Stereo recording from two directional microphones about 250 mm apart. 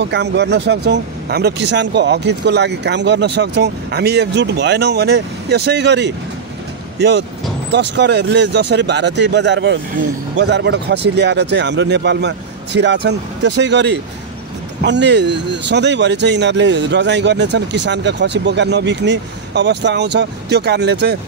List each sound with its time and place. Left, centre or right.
0.0 s speech: right